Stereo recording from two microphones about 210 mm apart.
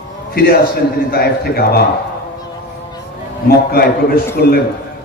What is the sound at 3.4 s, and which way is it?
A man's voice, 45° left (ahead or behind).